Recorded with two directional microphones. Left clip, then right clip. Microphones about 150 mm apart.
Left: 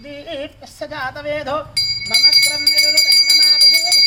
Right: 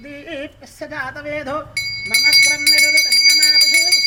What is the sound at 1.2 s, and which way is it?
Speech, 10° left (ahead or behind).